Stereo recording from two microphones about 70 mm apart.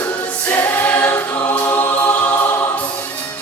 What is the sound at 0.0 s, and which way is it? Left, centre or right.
Choir, left.